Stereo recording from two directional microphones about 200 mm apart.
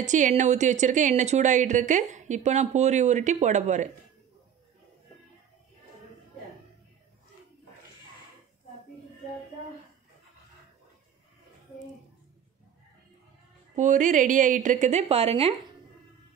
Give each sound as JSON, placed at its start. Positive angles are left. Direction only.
{"t": 0.0, "sound": "speech", "side_deg": -35}
{"t": 13.7, "sound": "speech", "side_deg": -40}